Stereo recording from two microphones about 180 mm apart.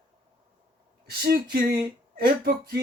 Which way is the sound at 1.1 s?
55° right (ahead or behind).